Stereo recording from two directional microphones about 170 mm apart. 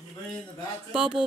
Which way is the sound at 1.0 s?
5° right (ahead or behind).